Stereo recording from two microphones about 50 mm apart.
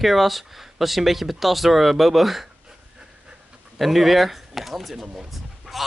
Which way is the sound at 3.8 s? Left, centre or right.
Centre.